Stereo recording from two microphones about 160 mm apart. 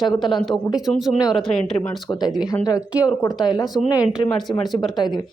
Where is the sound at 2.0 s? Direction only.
25° left (ahead or behind).